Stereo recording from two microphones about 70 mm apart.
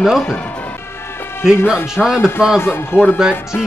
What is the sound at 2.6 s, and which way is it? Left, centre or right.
Speech, left.